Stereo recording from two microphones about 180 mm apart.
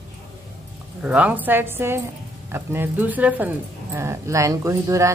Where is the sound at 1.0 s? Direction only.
5° right (ahead or behind).